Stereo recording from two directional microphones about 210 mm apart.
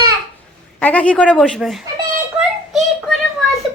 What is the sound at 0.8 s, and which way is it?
Speech, 5° left (ahead or behind).